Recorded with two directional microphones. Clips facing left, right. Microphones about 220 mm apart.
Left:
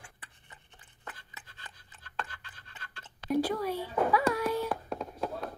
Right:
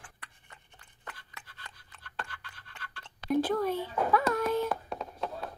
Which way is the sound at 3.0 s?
10° left (ahead or behind).